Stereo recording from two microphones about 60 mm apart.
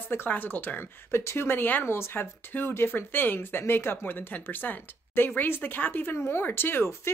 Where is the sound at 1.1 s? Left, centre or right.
Left.